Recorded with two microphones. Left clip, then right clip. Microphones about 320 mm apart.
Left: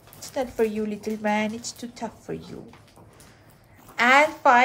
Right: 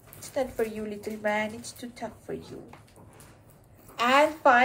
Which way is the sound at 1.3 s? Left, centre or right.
Left.